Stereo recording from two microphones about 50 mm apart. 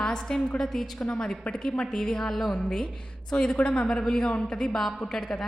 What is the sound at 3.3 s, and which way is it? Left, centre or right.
A woman's voice, centre.